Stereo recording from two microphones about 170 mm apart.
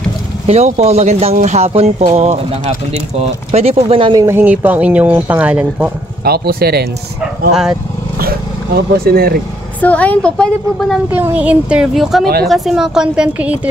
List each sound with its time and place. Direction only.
0.5 s speech: 40° right (ahead or behind); by 5.9 s 10° right (ahead or behind)
6.2 s speech: 65° right (ahead or behind)
8.2 s speech: 65° right (ahead or behind)
9.8 s a woman's voice: 10° left (ahead or behind)
11.1 s speech: 10° right (ahead or behind)